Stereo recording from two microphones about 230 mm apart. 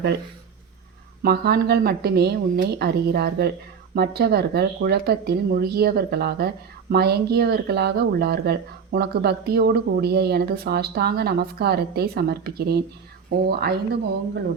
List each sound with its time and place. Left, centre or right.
1.2 s speech: right